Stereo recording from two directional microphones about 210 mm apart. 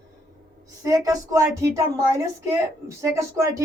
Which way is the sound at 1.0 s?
15° right (ahead or behind).